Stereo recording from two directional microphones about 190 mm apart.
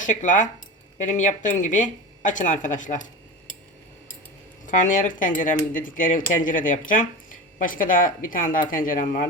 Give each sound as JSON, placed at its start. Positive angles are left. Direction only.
{"t": 0.0, "sound": "speech", "side_deg": 40}
{"t": 4.6, "sound": "speech", "side_deg": 40}